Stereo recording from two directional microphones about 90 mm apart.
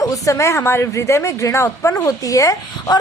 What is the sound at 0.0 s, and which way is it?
A woman's voice, 35° left (ahead or behind).